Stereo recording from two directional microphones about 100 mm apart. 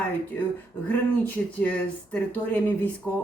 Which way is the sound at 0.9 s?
15° left (ahead or behind).